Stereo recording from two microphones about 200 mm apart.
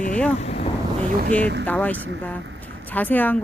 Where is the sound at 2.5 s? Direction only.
10° left (ahead or behind).